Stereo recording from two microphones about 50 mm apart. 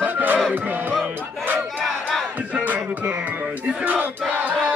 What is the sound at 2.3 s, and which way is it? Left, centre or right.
Music, right.